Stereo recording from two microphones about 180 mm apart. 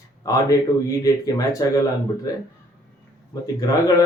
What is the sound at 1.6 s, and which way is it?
Speech, 20° left (ahead or behind).